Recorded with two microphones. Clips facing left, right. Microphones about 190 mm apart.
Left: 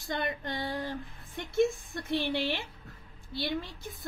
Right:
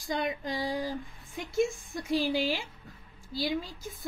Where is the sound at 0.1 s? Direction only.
Centre (ahead or behind).